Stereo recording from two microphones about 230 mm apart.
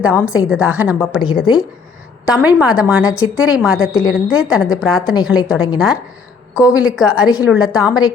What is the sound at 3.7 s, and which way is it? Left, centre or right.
Speech, left.